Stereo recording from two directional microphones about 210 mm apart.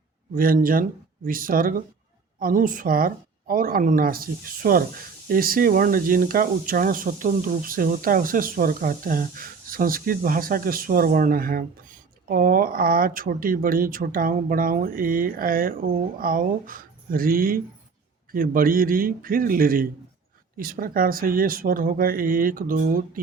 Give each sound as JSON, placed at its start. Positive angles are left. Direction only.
{"t": 0.3, "sound": "speech", "side_deg": -45}